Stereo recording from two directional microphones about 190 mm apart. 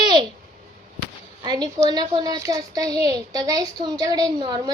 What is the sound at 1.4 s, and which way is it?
A woman's voice, 20° right (ahead or behind).